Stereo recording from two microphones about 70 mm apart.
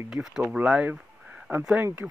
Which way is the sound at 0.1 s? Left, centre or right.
Centre.